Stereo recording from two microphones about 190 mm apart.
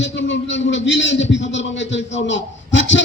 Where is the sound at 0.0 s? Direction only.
70° left (ahead or behind).